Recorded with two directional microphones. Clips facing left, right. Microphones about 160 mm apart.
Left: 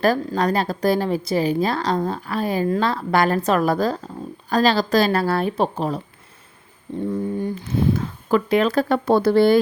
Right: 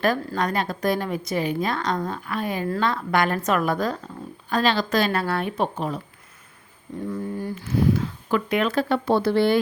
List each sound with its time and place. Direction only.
0.3 s a woman's voice: 35° left (ahead or behind)
7.1 s a woman's voice: 25° left (ahead or behind); by 9.6 s 40° left (ahead or behind)